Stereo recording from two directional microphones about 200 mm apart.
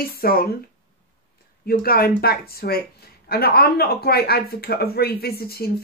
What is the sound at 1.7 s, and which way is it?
Speech, 50° left (ahead or behind).